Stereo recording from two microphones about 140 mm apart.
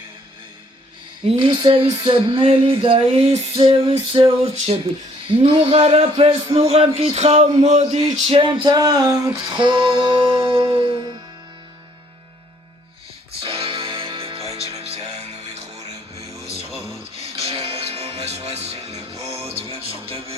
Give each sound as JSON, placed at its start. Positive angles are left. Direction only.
{"t": 1.2, "sound": "a sound", "side_deg": -35}
{"t": 5.4, "sound": "a man's voice", "side_deg": -40}
{"t": 8.3, "sound": "music", "side_deg": -40}
{"t": 9.6, "sound": "music", "side_deg": -35}
{"t": 13.4, "sound": "music", "side_deg": -40}
{"t": 17.4, "sound": "music", "side_deg": -45}